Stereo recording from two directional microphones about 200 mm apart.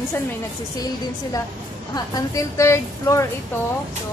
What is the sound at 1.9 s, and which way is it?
A woman's voice, 20° left (ahead or behind).